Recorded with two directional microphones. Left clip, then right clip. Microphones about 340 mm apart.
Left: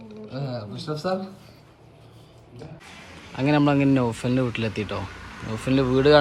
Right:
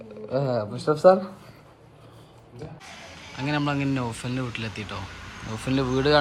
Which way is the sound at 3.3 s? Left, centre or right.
Centre.